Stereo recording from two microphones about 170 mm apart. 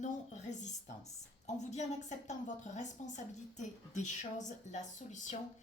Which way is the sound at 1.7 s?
45° left (ahead or behind).